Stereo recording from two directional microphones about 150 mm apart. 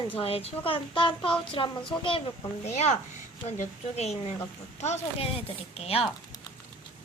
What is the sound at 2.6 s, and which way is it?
A child's voice, 50° left (ahead or behind).